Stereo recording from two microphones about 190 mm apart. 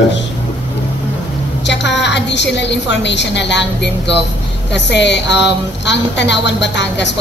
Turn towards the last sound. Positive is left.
turn(degrees=65)  # may be behind; listen again after turning